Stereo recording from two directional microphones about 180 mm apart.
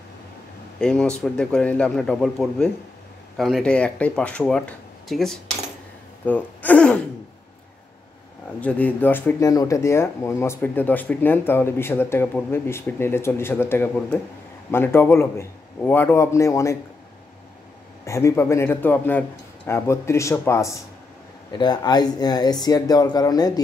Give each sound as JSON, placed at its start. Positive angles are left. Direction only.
{"t": 0.7, "sound": "speech", "side_deg": 5}
{"t": 8.5, "sound": "speech", "side_deg": 10}
{"t": 18.0, "sound": "speech", "side_deg": 15}